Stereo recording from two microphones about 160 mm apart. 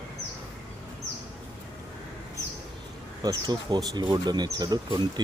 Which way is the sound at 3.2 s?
25° right (ahead or behind).